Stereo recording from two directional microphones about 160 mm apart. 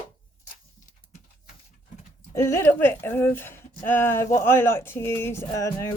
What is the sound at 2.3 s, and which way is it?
Speech, 20° left (ahead or behind).